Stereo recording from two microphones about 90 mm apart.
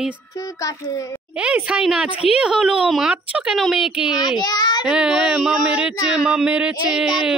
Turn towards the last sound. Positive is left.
turn(degrees=-5)  # may be behind; listen again after turning